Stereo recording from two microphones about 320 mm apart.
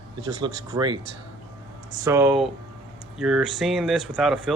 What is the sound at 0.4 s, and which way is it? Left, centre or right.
Speech, centre.